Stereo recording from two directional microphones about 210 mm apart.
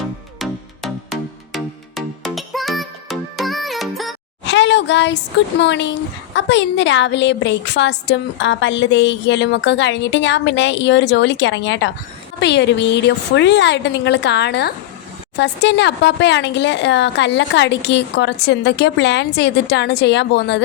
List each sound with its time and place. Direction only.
0.3 s music: centre (ahead or behind)
4.4 s a woman's voice: 55° left (ahead or behind)